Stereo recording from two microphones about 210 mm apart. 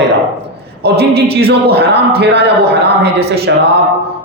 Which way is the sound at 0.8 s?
50° right (ahead or behind).